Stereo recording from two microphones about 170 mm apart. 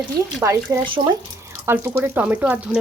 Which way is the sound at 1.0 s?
45° right (ahead or behind).